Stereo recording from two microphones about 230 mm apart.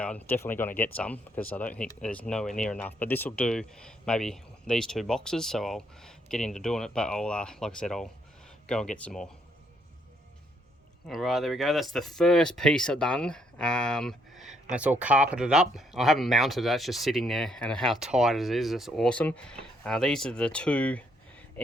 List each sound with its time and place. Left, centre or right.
0.0 s speech: centre
11.0 s speech: centre